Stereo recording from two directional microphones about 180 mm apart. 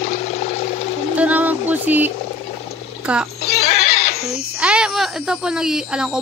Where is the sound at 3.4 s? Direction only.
60° left (ahead or behind).